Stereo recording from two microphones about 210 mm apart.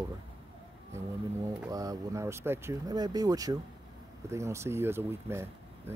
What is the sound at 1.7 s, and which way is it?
Speech, 15° right (ahead or behind).